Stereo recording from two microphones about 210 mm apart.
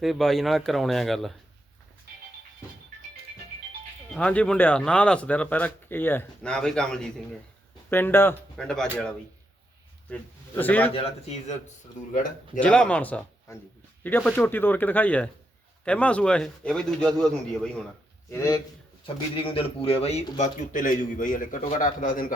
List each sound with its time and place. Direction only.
0.0 s speech: centre (ahead or behind)
4.1 s speech: 5° left (ahead or behind)
10.9 s speech: 30° left (ahead or behind)
12.5 s speech: 5° left (ahead or behind)
18.3 s speech: 15° left (ahead or behind)
19.0 s speech: 25° left (ahead or behind); by 22.3 s 40° left (ahead or behind)